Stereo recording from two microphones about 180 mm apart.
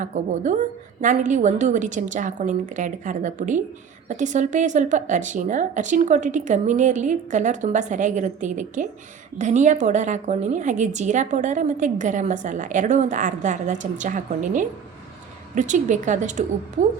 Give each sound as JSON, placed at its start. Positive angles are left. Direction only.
{"t": 0.1, "sound": "a woman's voice", "side_deg": -40}